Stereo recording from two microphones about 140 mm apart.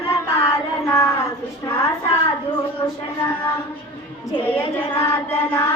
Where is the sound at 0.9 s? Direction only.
20° left (ahead or behind).